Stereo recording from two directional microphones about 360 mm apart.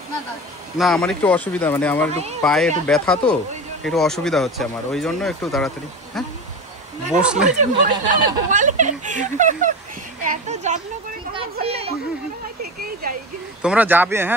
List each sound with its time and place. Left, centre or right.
0.7 s speech: centre
7.2 s speech: centre
7.4 s speech: right
10.2 s a sound: centre
11.5 s speech: centre
13.0 s a sound: right
13.6 s speech: centre